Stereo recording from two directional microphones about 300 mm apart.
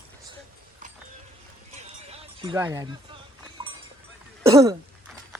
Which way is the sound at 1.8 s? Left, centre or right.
Centre.